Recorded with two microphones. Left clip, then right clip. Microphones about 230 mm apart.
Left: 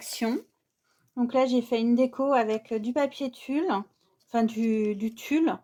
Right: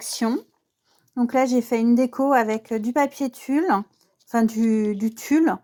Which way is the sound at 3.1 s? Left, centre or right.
Right.